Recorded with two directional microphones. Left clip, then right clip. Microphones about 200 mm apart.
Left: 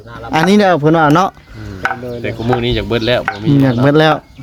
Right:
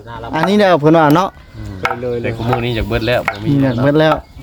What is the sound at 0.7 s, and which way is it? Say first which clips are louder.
Speech: right 1 dB; 5° left (ahead or behind).